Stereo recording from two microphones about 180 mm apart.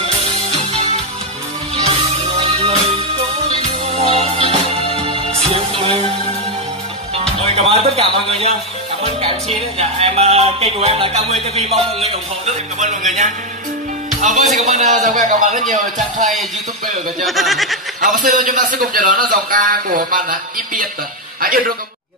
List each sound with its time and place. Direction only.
0.0 s music: 35° right (ahead or behind)
2.0 s music: 35° right (ahead or behind)
7.3 s music: 35° right (ahead or behind)
9.0 s speech: 35° right (ahead or behind)
14.5 s a man's voice: 45° right (ahead or behind)
17.2 s speech: centre (ahead or behind)
18.2 s a man's voice: 50° right (ahead or behind)